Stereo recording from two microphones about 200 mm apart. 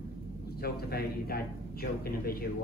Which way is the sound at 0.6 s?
50° left (ahead or behind).